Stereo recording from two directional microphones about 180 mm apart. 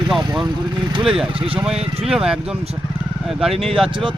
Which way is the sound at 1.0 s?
5° right (ahead or behind).